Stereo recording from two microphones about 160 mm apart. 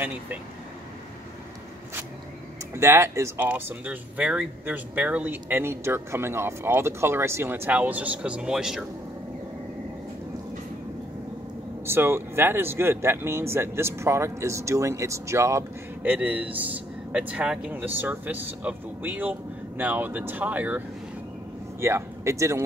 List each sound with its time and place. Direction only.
0.0 s speech: 10° right (ahead or behind)
2.7 s speech: 15° right (ahead or behind)
11.8 s speech: 15° right (ahead or behind)